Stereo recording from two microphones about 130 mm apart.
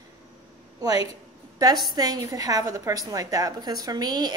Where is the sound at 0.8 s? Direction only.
30° right (ahead or behind).